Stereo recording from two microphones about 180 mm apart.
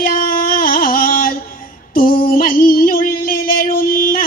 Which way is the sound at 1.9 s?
55° left (ahead or behind).